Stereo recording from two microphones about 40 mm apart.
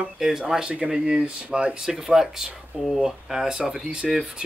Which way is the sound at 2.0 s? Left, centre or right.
Centre.